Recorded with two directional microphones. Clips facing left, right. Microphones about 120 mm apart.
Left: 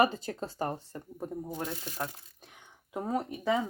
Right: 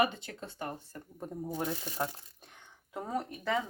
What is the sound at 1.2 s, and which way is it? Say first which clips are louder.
Speech: left 1 dB; 5° left (ahead or behind).